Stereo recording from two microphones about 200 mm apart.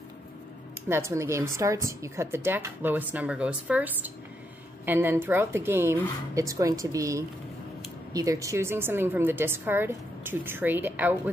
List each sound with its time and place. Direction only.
0.8 s a woman's voice: 15° right (ahead or behind)